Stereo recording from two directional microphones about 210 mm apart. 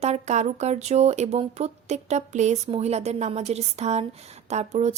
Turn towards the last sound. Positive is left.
turn(degrees=-30)  # may be behind; listen again after turning